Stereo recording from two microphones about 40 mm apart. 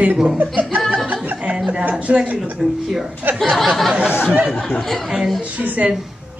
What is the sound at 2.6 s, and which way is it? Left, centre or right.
Speech, centre.